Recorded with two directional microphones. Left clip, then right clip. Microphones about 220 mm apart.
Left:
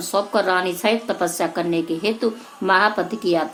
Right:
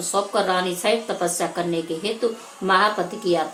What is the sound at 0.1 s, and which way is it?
A woman's voice, 45° left (ahead or behind).